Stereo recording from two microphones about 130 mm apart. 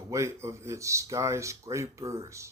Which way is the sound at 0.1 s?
20° right (ahead or behind).